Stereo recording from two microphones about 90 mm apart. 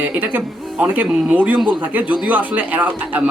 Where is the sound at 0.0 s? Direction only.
20° right (ahead or behind).